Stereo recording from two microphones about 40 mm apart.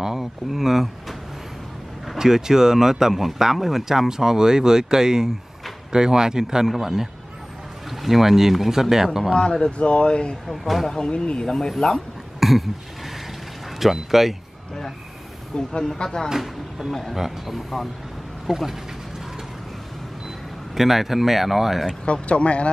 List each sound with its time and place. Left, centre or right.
0.0 s speech: centre
2.1 s speech: centre
9.3 s speech: left
10.5 s speech: centre
10.9 s speech: left
12.4 s a sound: centre
13.7 s speech: centre
15.5 s speech: centre
16.3 s speech: centre
20.7 s speech: centre
22.0 s speech: left